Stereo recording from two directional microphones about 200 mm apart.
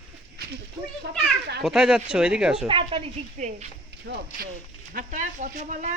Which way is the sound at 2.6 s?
25° right (ahead or behind).